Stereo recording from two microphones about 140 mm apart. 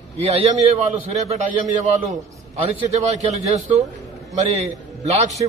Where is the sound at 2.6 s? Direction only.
50° right (ahead or behind).